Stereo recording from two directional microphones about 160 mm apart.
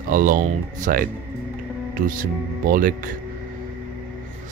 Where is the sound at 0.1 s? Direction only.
60° right (ahead or behind).